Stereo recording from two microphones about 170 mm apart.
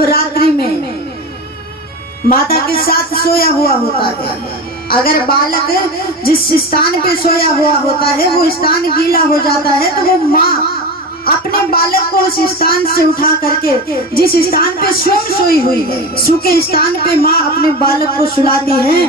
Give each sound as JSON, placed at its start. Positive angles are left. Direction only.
{"t": 0.1, "sound": "a woman's voice", "side_deg": 65}
{"t": 2.2, "sound": "speech", "side_deg": 60}